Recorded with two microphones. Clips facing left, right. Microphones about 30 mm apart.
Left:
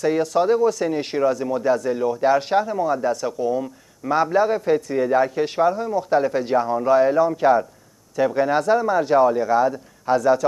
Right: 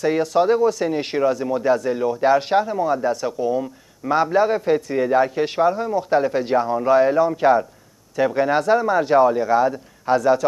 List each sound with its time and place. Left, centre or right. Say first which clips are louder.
0.0 s a man's voice: right 1 dB; centre